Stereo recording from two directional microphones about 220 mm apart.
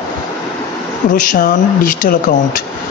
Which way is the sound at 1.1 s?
40° left (ahead or behind).